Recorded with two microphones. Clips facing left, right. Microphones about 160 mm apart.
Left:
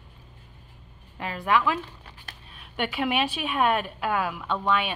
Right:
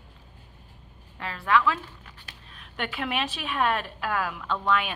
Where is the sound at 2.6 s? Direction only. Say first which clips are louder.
Left 4 dB; 5° left (ahead or behind).